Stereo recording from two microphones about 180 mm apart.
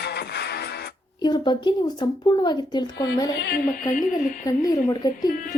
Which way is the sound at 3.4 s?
60° left (ahead or behind).